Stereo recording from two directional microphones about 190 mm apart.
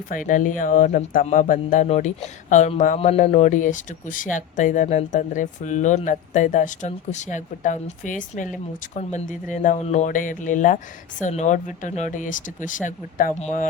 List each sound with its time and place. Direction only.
0.1 s speech: 45° left (ahead or behind)